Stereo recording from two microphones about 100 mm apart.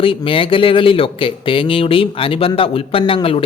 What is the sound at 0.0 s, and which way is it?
A man's voice, 60° left (ahead or behind).